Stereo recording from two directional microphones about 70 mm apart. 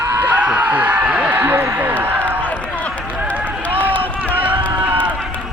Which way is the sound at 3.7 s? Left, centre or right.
Right.